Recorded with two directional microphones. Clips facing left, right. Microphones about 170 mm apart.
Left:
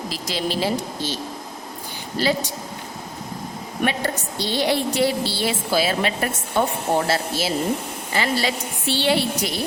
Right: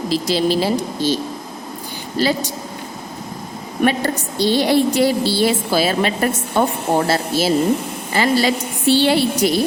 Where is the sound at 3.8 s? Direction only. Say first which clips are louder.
Right 6 dB; 40° right (ahead or behind).